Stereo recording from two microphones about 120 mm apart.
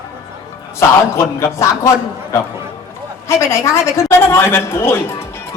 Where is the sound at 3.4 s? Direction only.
25° left (ahead or behind).